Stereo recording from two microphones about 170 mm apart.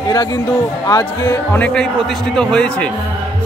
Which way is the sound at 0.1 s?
25° left (ahead or behind).